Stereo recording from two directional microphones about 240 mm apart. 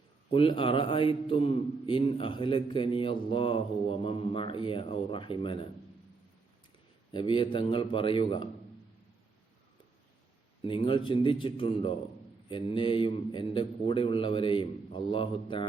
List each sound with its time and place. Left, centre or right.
0.3 s a man's voice: left
7.1 s a man's voice: centre
10.6 s a man's voice: left